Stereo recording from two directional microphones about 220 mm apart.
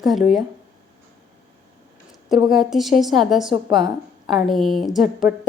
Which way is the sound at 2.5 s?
Centre (ahead or behind).